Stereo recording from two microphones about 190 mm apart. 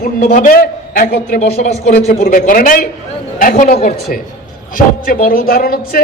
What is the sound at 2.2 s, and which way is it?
A man's voice, 45° left (ahead or behind).